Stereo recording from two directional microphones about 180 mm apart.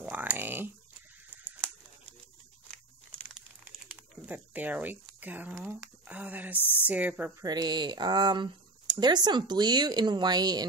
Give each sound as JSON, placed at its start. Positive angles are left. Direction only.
{"t": 0.0, "sound": "a sound", "side_deg": -10}
{"t": 3.2, "sound": "crumpling", "side_deg": -5}
{"t": 6.9, "sound": "speech", "side_deg": -10}
{"t": 7.4, "sound": "speech", "side_deg": -25}